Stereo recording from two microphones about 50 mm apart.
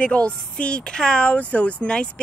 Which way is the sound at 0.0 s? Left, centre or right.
Left.